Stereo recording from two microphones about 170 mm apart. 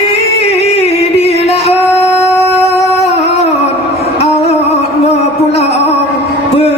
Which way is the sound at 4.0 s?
40° left (ahead or behind).